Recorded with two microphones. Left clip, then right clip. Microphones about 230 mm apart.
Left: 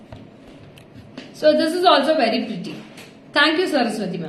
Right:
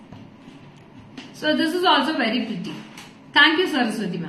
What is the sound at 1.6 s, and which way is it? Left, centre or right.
A woman's voice, centre.